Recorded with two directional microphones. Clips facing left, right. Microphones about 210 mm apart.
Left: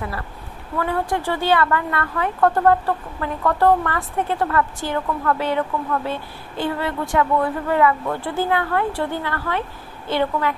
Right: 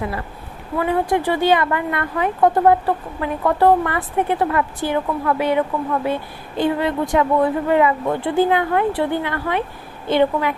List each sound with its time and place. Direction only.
0.7 s a woman's voice: 15° right (ahead or behind)